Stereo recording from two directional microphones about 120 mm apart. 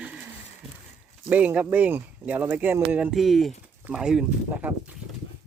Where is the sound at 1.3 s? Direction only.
10° right (ahead or behind).